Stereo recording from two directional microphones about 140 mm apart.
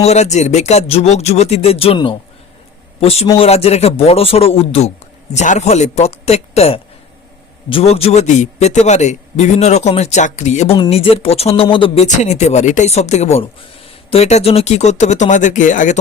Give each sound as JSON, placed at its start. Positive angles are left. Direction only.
{"t": 0.0, "sound": "a man's voice", "side_deg": 50}
{"t": 3.0, "sound": "a man's voice", "side_deg": 45}
{"t": 10.8, "sound": "a man's voice", "side_deg": 45}
{"t": 12.0, "sound": "speech", "side_deg": 55}